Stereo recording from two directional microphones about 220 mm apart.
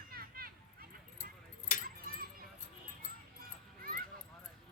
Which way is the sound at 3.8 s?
40° right (ahead or behind).